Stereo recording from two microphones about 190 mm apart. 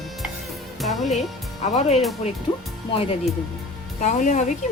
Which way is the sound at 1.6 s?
35° left (ahead or behind).